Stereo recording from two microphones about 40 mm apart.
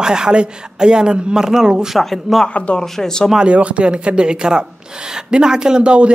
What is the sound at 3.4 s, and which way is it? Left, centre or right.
A man's voice, right.